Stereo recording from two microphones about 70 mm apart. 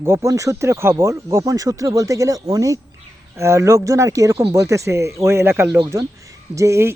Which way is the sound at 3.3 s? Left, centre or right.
Right.